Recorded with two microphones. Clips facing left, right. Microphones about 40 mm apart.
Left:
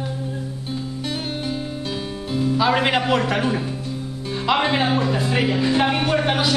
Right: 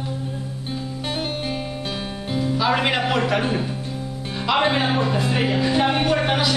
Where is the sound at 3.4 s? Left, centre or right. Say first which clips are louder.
Left 1 dB; right.